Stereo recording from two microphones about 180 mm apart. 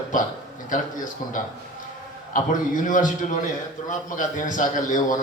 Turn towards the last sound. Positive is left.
turn(degrees=45)  # may be behind; listen again after turning